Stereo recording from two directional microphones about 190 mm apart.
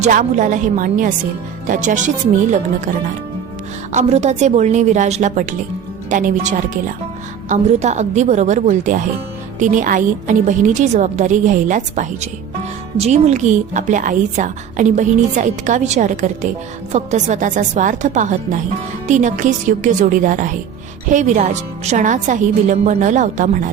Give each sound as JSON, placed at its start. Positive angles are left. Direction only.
{"t": 0.0, "sound": "a woman's voice", "side_deg": -40}
{"t": 3.9, "sound": "a woman's voice", "side_deg": -35}